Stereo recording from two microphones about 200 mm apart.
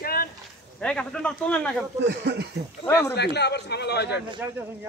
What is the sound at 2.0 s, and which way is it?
Speech, 55° right (ahead or behind).